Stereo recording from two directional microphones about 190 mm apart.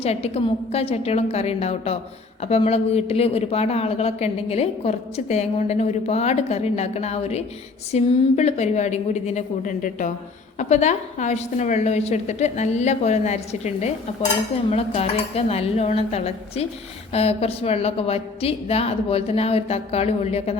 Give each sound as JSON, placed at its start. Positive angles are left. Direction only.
{"t": 0.0, "sound": "speech", "side_deg": 30}